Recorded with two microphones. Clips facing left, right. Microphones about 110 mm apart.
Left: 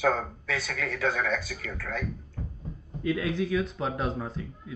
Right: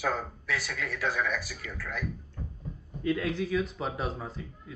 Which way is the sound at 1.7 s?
25° left (ahead or behind).